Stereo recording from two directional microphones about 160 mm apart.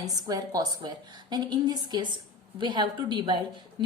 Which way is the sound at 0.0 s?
25° right (ahead or behind).